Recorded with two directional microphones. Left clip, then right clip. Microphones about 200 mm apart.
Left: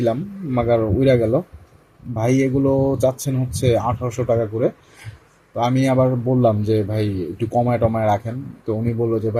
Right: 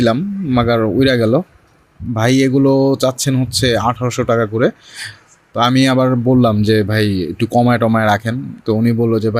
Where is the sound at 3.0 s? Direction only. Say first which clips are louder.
Right 4 dB; 45° right (ahead or behind).